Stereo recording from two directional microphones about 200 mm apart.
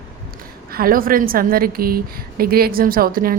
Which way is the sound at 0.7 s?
45° right (ahead or behind).